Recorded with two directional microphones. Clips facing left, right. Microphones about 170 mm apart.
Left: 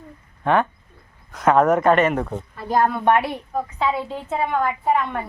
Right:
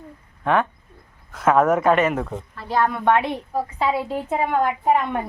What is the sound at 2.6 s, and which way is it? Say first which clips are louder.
Speech: left 2 dB; 45° left (ahead or behind).